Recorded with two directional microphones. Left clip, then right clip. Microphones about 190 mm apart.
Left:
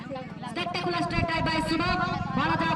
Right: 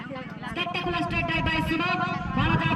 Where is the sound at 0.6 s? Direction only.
20° right (ahead or behind).